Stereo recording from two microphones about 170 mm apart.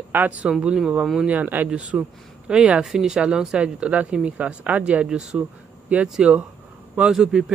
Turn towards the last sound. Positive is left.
turn(degrees=-5)  # may be behind; listen again after turning